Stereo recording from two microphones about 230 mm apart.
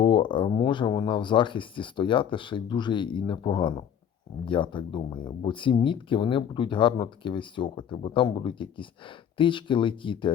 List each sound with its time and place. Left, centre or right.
0.0 s speech: left